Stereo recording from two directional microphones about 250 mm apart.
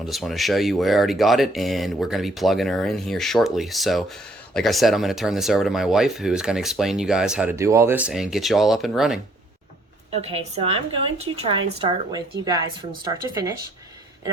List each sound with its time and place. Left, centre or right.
0.0 s speech: centre
10.1 s a woman's voice: right